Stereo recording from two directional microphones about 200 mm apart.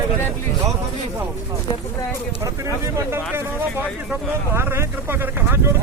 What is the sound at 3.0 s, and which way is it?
Speech, 10° right (ahead or behind).